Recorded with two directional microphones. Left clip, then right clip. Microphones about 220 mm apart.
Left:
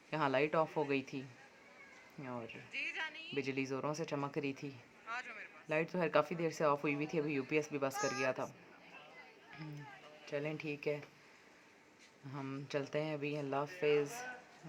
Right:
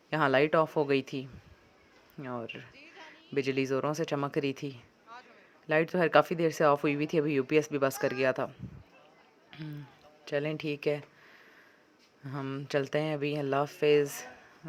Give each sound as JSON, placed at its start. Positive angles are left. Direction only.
{"t": 0.1, "sound": "speech", "side_deg": -25}
{"t": 2.2, "sound": "speech", "side_deg": -25}
{"t": 10.2, "sound": "speech", "side_deg": -30}
{"t": 12.2, "sound": "speech", "side_deg": -25}